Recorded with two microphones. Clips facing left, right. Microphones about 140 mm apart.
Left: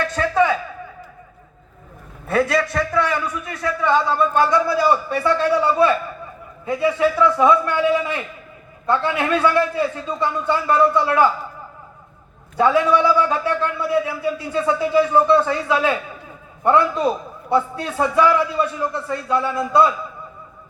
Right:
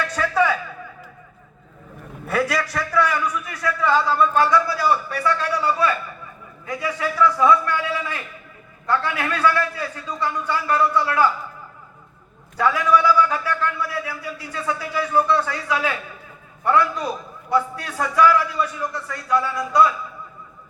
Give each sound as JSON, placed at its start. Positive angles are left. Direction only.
{"t": 0.1, "sound": "a sound", "side_deg": 25}
{"t": 2.2, "sound": "a man's voice", "side_deg": 25}
{"t": 12.5, "sound": "a man's voice", "side_deg": 25}